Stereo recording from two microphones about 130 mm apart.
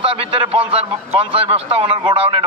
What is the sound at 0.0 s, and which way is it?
A man's voice, 45° right (ahead or behind).